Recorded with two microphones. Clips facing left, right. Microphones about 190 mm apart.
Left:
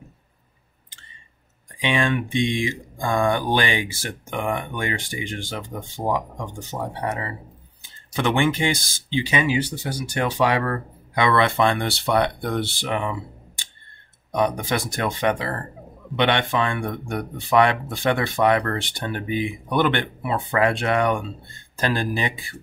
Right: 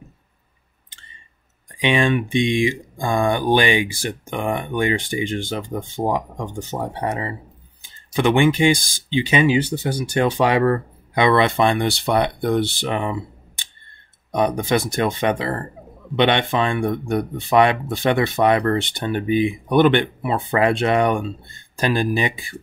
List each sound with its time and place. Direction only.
1.8 s speech: 20° right (ahead or behind)
6.9 s speech: 20° right (ahead or behind)
12.8 s speech: 30° right (ahead or behind)
14.3 s speech: 20° right (ahead or behind)